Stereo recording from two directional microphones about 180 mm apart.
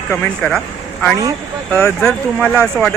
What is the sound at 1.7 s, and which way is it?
Speech, 15° left (ahead or behind).